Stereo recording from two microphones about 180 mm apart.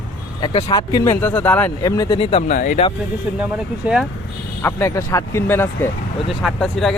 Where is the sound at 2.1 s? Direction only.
30° left (ahead or behind).